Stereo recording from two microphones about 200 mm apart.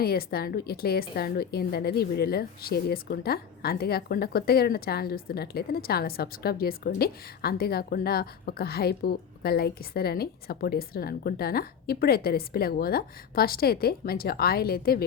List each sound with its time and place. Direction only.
0.0 s a woman's voice: 50° left (ahead or behind)